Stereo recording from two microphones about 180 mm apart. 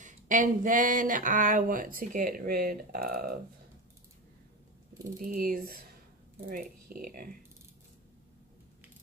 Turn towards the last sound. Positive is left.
turn(degrees=-55)  # may be behind; listen again after turning